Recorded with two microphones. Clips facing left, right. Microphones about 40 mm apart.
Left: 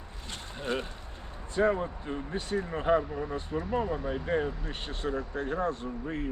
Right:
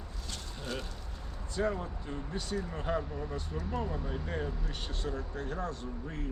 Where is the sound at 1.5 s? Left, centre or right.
Left.